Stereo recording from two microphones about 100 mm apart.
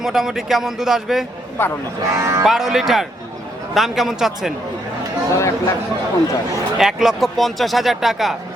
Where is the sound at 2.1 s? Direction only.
30° right (ahead or behind).